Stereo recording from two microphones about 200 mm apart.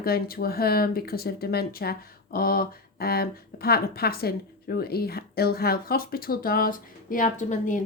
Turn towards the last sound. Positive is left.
turn(degrees=40)  # may be behind; listen again after turning